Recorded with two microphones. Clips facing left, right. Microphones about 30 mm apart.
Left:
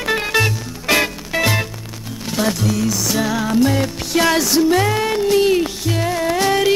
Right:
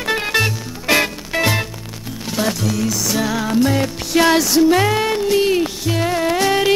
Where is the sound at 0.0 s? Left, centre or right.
Centre.